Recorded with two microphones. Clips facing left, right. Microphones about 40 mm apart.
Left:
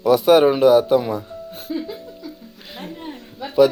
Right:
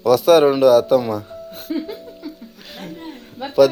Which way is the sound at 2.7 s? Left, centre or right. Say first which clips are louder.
Even; centre.